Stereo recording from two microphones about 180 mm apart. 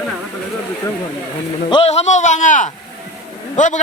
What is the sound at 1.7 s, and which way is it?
A man's voice, 35° left (ahead or behind).